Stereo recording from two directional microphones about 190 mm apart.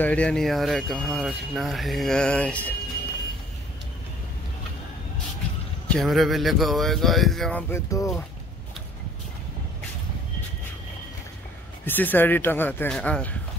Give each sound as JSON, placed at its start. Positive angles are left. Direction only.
{"t": 0.0, "sound": "speech", "side_deg": 5}
{"t": 5.9, "sound": "speech", "side_deg": 0}
{"t": 7.7, "sound": "speech", "side_deg": 15}
{"t": 11.8, "sound": "speech", "side_deg": 10}